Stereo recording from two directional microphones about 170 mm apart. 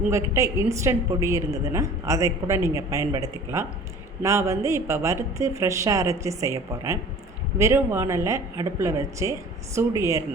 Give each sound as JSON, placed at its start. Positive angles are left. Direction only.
{"t": 0.1, "sound": "a woman's voice", "side_deg": -15}